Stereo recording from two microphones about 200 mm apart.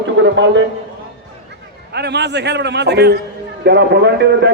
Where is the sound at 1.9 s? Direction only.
55° right (ahead or behind).